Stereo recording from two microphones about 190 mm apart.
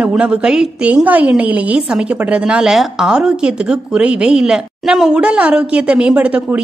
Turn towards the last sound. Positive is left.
turn(degrees=-5)  # may be behind; listen again after turning